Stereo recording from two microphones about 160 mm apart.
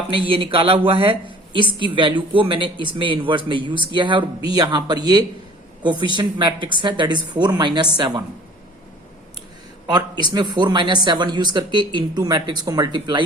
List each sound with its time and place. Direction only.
0.1 s a man's voice: 30° right (ahead or behind)
9.8 s speech: 25° right (ahead or behind)